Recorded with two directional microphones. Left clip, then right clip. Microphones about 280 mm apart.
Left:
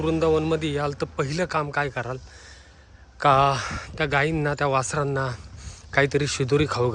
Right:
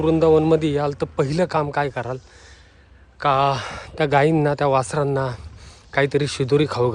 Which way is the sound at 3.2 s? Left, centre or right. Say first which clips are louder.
Even; centre.